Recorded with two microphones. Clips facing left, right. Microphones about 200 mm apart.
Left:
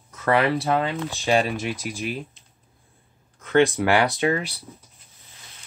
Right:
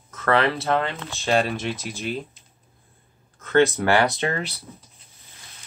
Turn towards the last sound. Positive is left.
turn(degrees=15)  # may be behind; listen again after turning